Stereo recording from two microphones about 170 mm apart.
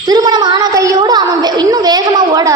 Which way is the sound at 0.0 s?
25° right (ahead or behind).